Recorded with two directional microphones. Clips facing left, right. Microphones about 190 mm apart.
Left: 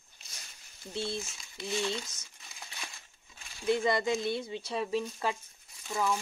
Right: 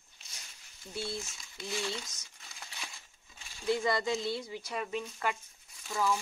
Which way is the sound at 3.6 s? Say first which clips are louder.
Left 2 dB; 20° left (ahead or behind).